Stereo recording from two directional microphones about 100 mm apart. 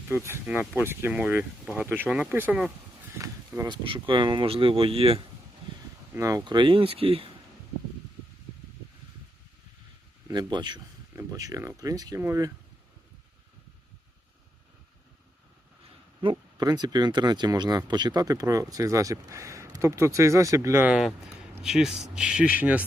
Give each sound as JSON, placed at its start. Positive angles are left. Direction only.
{"t": 0.3, "sound": "speech", "side_deg": -20}
{"t": 3.2, "sound": "speech", "side_deg": -30}
{"t": 3.7, "sound": "speech", "side_deg": -55}
{"t": 4.5, "sound": "speech", "side_deg": -65}
{"t": 6.1, "sound": "speech", "side_deg": -30}
{"t": 6.4, "sound": "speech", "side_deg": -50}
{"t": 10.3, "sound": "speech", "side_deg": -45}
{"t": 11.3, "sound": "speech", "side_deg": -35}
{"t": 16.2, "sound": "speech", "side_deg": -45}
{"t": 20.8, "sound": "speech", "side_deg": -5}